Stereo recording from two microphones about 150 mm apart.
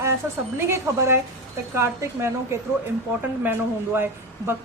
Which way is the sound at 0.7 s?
15° right (ahead or behind).